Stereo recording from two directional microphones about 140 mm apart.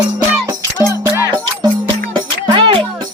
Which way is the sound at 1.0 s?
30° right (ahead or behind).